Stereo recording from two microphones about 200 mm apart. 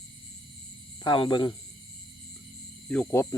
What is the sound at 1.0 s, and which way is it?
Speech, 25° left (ahead or behind).